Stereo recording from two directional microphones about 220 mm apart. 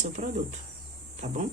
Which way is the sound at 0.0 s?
35° right (ahead or behind).